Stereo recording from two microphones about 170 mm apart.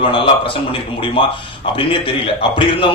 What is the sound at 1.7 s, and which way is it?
A man's voice, 30° left (ahead or behind).